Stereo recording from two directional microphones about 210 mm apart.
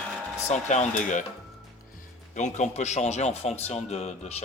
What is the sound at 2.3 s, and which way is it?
A man's voice, 35° left (ahead or behind).